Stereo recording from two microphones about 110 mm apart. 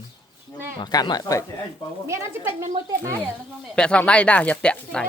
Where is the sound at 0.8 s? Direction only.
40° left (ahead or behind).